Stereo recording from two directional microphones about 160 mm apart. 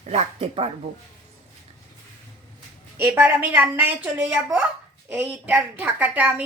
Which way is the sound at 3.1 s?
10° right (ahead or behind).